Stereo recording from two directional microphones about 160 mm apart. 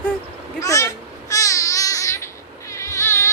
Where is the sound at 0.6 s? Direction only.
20° left (ahead or behind).